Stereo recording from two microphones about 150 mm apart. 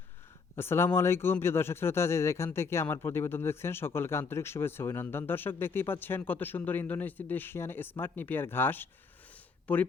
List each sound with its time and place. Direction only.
0.5 s speech: 15° left (ahead or behind)